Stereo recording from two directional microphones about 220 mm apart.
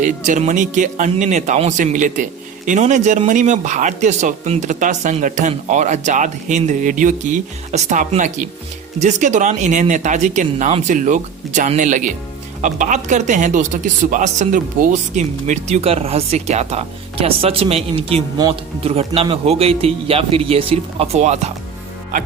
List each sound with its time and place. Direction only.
0.0 s speech: 35° right (ahead or behind)